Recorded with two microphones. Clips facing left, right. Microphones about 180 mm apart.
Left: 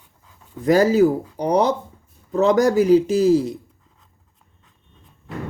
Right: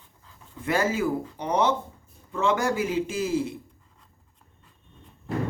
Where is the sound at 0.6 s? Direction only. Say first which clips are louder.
Left 10 dB; 40° left (ahead or behind).